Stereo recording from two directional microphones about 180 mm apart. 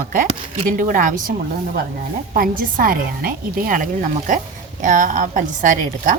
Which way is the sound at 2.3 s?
55° right (ahead or behind).